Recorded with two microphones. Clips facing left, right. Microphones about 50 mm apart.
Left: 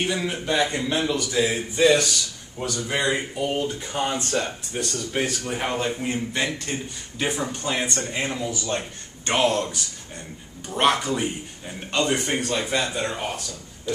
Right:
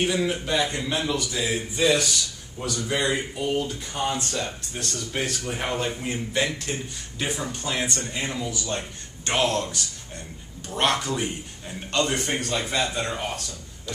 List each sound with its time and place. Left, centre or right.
0.0 s a man's voice: centre
2.9 s speech: centre
4.7 s a man's voice: centre
8.1 s speech: left
9.2 s speech: centre